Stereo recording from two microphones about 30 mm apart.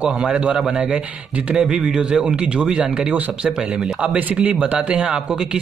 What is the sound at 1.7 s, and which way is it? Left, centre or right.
A man's voice, right.